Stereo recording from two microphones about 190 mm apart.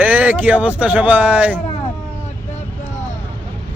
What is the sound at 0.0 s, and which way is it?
Speech, 10° right (ahead or behind).